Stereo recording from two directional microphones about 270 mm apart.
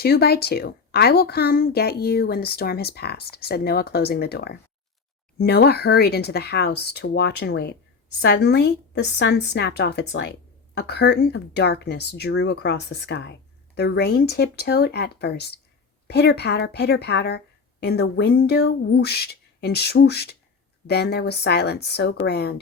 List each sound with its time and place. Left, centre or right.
0.0 s speech: left